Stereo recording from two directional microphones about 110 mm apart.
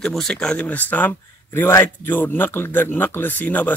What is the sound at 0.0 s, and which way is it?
Speech, 5° left (ahead or behind).